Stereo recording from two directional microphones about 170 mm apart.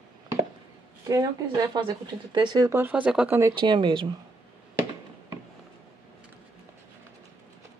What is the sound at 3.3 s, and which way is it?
Speech, 25° right (ahead or behind).